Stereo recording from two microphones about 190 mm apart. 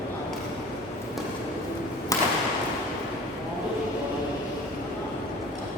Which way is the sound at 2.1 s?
15° left (ahead or behind).